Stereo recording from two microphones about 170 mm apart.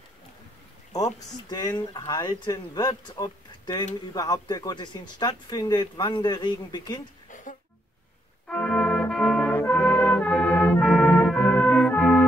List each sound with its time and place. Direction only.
0.9 s speech: 20° left (ahead or behind)
7.2 s a sound: 50° left (ahead or behind)
8.5 s brass instrument: 5° left (ahead or behind)